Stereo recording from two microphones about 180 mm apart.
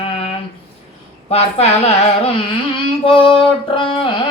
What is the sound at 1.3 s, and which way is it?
Singing, 35° left (ahead or behind).